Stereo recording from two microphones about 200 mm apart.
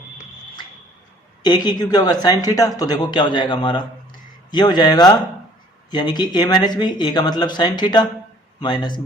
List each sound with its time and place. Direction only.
1.4 s speech: 20° left (ahead or behind)